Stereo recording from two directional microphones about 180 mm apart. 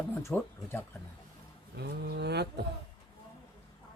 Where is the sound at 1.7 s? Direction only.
65° right (ahead or behind).